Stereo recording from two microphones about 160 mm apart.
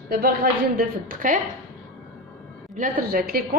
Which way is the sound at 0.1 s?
65° right (ahead or behind).